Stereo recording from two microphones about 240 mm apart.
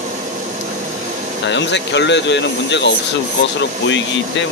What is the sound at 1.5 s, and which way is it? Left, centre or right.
Speech, left.